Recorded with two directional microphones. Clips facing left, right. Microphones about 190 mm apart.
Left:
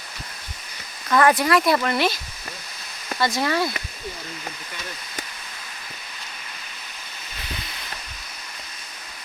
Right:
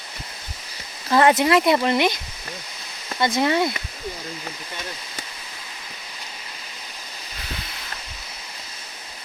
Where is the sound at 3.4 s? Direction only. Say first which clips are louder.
Right 5 dB; 20° right (ahead or behind).